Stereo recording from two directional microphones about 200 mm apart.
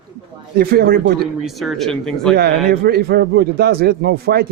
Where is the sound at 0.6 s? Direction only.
50° right (ahead or behind).